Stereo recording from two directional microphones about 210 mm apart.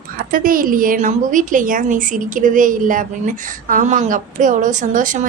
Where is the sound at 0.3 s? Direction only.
40° right (ahead or behind).